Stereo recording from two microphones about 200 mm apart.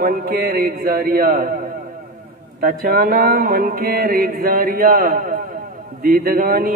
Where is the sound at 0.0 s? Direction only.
45° right (ahead or behind).